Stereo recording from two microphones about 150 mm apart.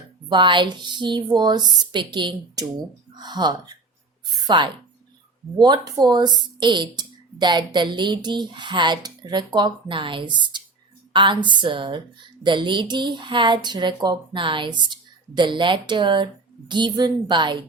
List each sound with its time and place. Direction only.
0.3 s a woman's voice: 30° right (ahead or behind)